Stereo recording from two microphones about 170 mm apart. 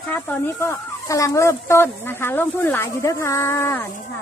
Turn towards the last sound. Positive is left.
turn(degrees=15)  # may be behind; listen again after turning